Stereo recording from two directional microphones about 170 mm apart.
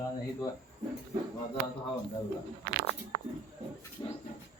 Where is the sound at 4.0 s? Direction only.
25° left (ahead or behind).